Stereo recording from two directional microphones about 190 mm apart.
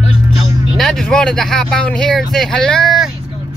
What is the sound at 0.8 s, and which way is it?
Speech, centre (ahead or behind).